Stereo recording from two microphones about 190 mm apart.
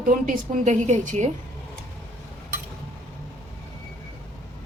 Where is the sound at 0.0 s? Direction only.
40° right (ahead or behind).